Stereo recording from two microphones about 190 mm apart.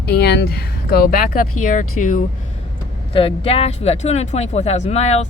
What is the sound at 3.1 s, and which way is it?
Speech, 30° left (ahead or behind).